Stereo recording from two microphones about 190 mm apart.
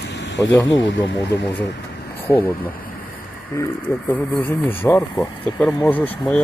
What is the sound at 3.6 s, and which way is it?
Speech, 15° left (ahead or behind).